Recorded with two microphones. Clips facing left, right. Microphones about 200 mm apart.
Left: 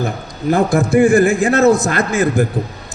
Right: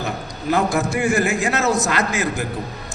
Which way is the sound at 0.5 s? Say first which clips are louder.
Left 6 dB; 55° left (ahead or behind).